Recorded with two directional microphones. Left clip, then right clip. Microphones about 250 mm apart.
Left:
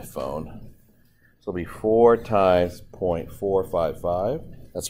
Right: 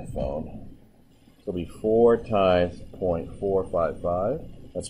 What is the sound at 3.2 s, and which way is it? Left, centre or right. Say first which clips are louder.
Speech: left 2 dB; left.